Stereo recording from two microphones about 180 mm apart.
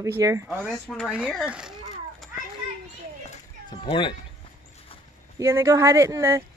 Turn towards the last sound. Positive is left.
turn(degrees=-15)  # may be behind; listen again after turning